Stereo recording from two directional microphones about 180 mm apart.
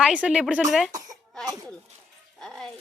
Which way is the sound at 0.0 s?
5° right (ahead or behind).